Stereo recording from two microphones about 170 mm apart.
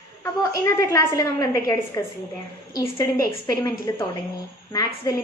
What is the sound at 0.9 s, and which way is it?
A woman's voice, 20° left (ahead or behind).